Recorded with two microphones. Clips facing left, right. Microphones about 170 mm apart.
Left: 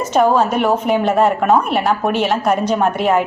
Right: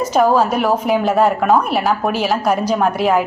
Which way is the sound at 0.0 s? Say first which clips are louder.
Even; 5° right (ahead or behind).